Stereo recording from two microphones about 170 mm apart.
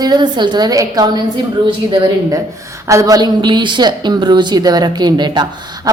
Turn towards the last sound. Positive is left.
turn(degrees=-25)  # may be behind; listen again after turning